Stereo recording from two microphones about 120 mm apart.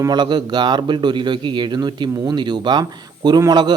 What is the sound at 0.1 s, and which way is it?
A man's voice, 40° right (ahead or behind).